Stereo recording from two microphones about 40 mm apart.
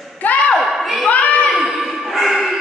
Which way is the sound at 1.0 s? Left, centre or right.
Left.